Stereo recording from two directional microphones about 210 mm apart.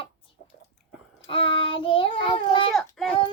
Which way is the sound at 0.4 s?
55° left (ahead or behind).